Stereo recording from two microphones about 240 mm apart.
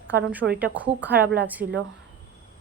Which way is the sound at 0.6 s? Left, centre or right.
Centre.